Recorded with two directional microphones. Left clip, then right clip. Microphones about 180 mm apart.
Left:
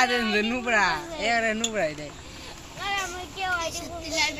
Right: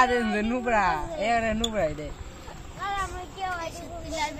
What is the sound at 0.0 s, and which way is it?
Speech, 60° right (ahead or behind).